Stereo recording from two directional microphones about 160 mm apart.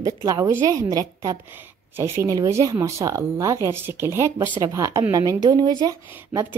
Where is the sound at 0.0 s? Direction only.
20° right (ahead or behind).